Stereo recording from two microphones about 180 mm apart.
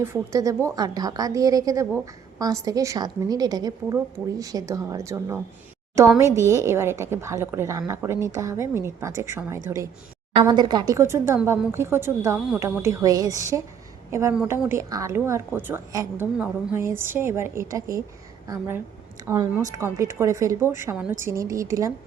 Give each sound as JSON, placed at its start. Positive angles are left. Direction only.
{"t": 0.0, "sound": "a woman's voice", "side_deg": -15}